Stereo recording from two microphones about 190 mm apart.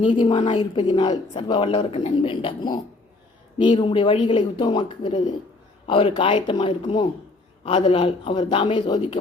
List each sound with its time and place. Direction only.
0.0 s a man's voice: 25° left (ahead or behind)